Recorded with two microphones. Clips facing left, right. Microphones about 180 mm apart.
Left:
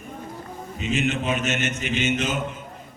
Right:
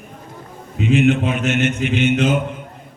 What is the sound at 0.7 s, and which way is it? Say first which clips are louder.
A man's voice: right 10 dB; 60° right (ahead or behind).